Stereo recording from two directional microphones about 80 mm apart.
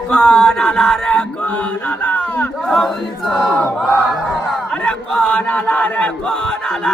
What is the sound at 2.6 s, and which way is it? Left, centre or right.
Chant, centre.